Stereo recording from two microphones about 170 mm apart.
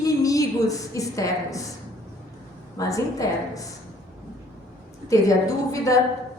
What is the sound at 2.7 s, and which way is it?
Speech, 20° left (ahead or behind).